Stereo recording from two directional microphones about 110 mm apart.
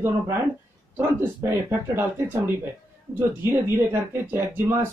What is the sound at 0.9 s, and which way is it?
Speech, 20° right (ahead or behind).